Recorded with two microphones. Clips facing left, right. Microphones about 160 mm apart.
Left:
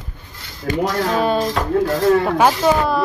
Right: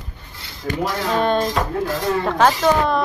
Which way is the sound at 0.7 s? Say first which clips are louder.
Left 4 dB; 55° left (ahead or behind).